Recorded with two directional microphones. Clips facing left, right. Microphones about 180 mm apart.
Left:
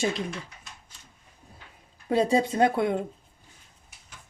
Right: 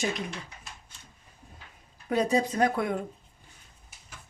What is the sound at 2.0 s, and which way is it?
Speech, 25° left (ahead or behind).